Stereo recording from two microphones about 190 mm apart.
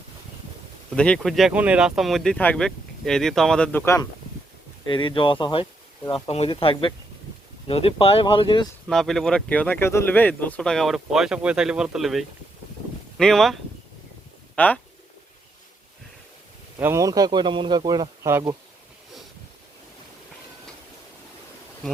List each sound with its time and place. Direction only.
0.9 s speech: 5° left (ahead or behind)
4.9 s speech: 25° left (ahead or behind)
8.9 s speech: centre (ahead or behind)
16.8 s speech: 15° right (ahead or behind)